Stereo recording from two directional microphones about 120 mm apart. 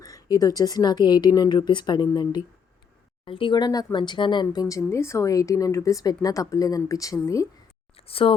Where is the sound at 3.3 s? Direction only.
45° left (ahead or behind); by 7.4 s 25° left (ahead or behind).